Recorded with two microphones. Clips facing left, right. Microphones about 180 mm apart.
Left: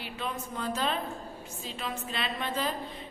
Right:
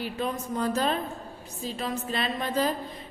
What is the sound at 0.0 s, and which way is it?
A woman's voice, 40° right (ahead or behind).